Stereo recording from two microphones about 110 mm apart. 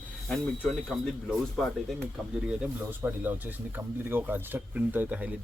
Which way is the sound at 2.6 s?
15° right (ahead or behind).